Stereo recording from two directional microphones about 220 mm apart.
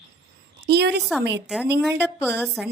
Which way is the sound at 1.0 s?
Centre (ahead or behind).